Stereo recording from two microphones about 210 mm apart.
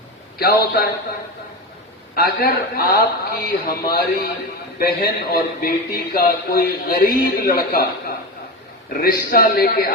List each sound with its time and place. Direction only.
0.3 s a man's voice: 50° left (ahead or behind)
2.1 s a man's voice: 45° left (ahead or behind)